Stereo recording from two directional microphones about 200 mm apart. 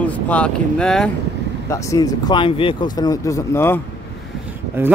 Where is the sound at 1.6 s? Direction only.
15° left (ahead or behind).